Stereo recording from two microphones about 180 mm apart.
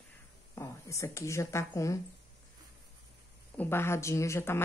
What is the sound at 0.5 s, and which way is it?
A woman's voice, 15° left (ahead or behind).